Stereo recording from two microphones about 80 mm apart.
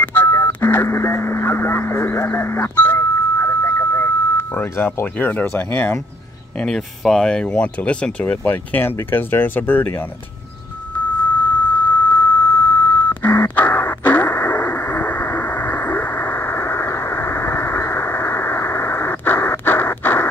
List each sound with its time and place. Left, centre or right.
0.0 s speech: left
6.6 s speech: centre; by 9.9 s left
11.7 s a sound: left